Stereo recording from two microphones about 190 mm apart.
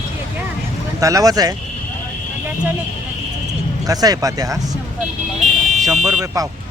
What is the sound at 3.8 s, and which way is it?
Speech, 20° right (ahead or behind).